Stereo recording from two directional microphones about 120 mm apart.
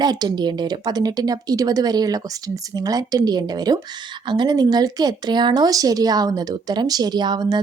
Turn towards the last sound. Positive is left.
turn(degrees=-35)  # may be behind; listen again after turning